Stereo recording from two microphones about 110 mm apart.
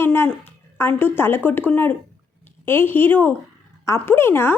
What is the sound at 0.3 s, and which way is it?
A woman's voice, 20° left (ahead or behind).